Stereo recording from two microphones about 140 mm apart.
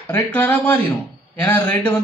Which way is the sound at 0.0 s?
15° left (ahead or behind).